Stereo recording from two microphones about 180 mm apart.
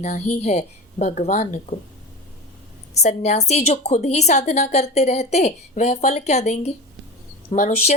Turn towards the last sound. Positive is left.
turn(degrees=40)  # may be behind; listen again after turning